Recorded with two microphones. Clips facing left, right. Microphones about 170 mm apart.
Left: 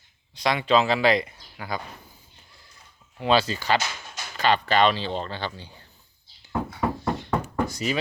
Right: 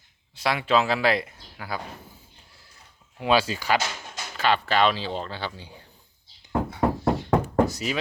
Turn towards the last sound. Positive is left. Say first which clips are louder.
# left 1 dB
turn(degrees=0)  # may be behind; listen again after turning